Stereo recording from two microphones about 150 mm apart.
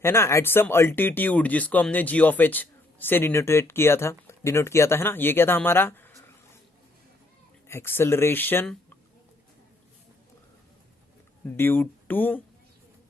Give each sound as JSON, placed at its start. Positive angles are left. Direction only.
{"t": 0.0, "sound": "speech", "side_deg": 20}
{"t": 7.7, "sound": "speech", "side_deg": 15}
{"t": 11.4, "sound": "speech", "side_deg": 15}